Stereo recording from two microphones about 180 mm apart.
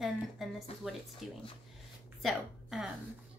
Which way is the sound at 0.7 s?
35° left (ahead or behind).